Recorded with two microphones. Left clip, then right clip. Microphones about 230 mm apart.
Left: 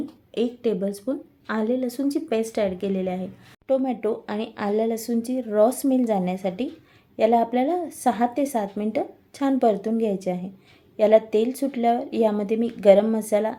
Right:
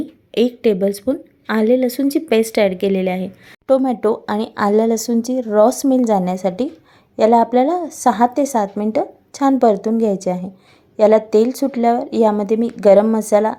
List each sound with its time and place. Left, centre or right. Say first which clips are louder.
0.3 s a woman's voice: right 9 dB; right